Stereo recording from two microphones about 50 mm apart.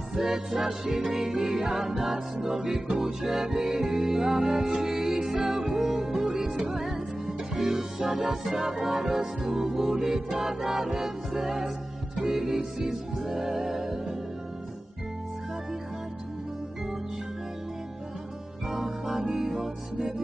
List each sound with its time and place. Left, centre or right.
0.1 s music: centre
1.1 s music: right
1.5 s music: centre
7.6 s music: right
13.2 s music: right
13.5 s music: centre
18.7 s music: centre